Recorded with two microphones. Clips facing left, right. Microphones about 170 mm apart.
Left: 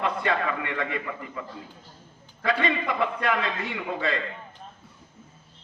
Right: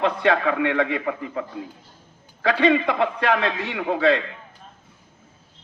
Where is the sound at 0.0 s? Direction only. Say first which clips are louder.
Right 6 dB; 85° right.